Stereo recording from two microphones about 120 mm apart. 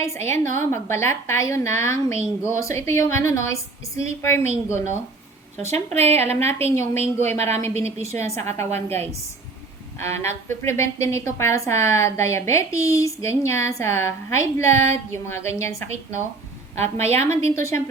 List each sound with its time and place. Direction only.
0.0 s a woman's voice: 20° left (ahead or behind)
5.6 s speech: 65° right (ahead or behind)
8.0 s a woman's voice: 20° left (ahead or behind)
10.0 s a woman's voice: 20° left (ahead or behind)
16.7 s speech: 65° right (ahead or behind)
17.2 s a woman's voice: 25° left (ahead or behind)